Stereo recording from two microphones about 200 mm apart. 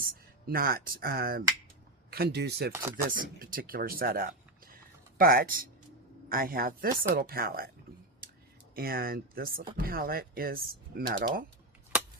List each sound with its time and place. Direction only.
0.4 s speech: 50° right (ahead or behind)
8.7 s speech: 50° right (ahead or behind)